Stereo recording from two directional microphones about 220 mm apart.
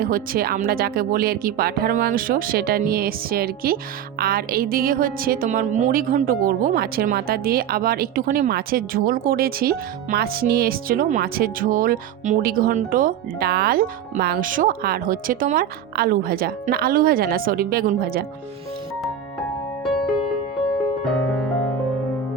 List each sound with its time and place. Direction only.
0.0 s a woman's voice: 40° right (ahead or behind)
19.8 s music: centre (ahead or behind)